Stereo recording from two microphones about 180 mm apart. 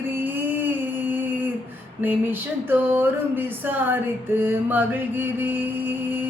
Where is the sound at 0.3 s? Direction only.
10° right (ahead or behind).